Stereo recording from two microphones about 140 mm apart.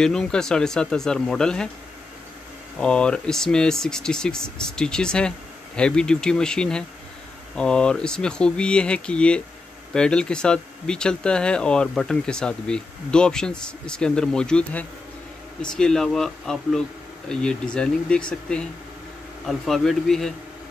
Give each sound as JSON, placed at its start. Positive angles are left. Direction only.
{"t": 0.0, "sound": "speech", "side_deg": 5}
{"t": 2.8, "sound": "speech", "side_deg": 5}